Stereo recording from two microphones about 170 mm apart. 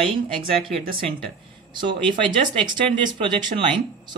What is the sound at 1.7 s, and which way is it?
Speech, 25° right (ahead or behind).